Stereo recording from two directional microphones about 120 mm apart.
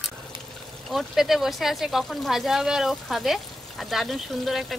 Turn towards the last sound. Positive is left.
turn(degrees=0)  # may be behind; listen again after turning